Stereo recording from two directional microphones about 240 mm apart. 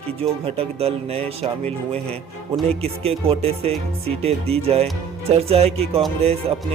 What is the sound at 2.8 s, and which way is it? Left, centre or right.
Speech, right.